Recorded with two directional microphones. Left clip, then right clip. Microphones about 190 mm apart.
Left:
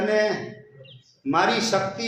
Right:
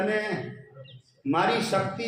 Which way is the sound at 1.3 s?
35° left (ahead or behind).